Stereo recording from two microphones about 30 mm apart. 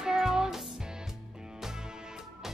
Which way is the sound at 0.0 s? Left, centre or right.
Right.